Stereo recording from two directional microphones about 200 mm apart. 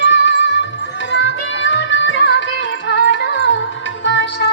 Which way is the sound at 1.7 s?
65° left (ahead or behind).